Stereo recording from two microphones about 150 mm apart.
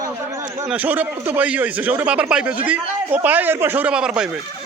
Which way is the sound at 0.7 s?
10° right (ahead or behind).